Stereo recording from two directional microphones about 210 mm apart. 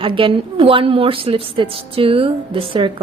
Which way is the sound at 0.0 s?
25° right (ahead or behind).